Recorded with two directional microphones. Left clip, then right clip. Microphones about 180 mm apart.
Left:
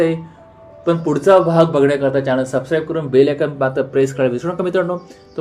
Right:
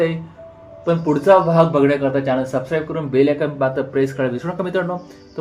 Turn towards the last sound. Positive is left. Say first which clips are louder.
# left 4 dB
turn(degrees=25)  # may be behind; listen again after turning